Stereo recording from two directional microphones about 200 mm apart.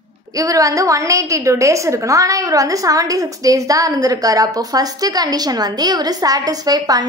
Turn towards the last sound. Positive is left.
turn(degrees=-20)  # may be behind; listen again after turning